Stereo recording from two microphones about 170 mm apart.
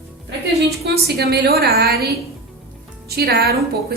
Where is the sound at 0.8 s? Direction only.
70° right (ahead or behind).